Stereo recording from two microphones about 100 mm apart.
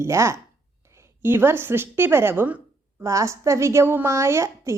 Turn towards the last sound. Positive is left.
turn(degrees=-30)  # may be behind; listen again after turning